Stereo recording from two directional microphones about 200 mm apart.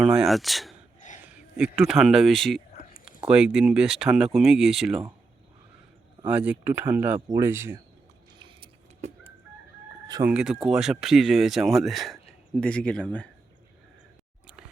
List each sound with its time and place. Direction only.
0.0 s a man's voice: centre (ahead or behind)
6.2 s speech: 5° right (ahead or behind)
8.4 s a sound: 25° right (ahead or behind)
10.2 s speech: 5° right (ahead or behind)